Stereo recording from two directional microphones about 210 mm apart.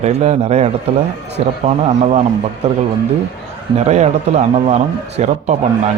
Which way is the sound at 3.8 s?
30° right (ahead or behind).